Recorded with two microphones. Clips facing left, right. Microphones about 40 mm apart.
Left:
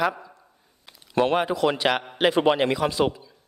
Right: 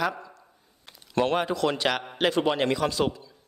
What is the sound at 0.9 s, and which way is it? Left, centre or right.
A man's voice, centre.